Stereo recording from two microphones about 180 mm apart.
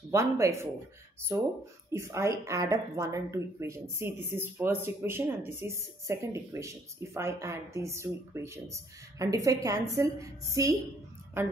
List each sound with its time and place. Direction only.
0.1 s speech: 15° right (ahead or behind)